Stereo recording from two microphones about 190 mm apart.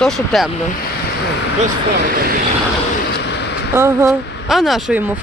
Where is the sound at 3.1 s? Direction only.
60° left (ahead or behind).